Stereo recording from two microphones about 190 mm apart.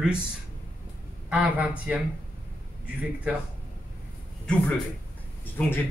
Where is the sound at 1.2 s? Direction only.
5° right (ahead or behind).